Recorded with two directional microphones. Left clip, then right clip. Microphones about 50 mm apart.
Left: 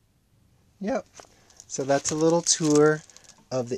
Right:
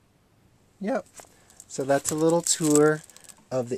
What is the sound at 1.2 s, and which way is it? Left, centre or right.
Speech, left.